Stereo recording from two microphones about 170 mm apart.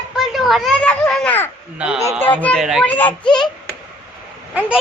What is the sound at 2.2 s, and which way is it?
Speech, 10° left (ahead or behind).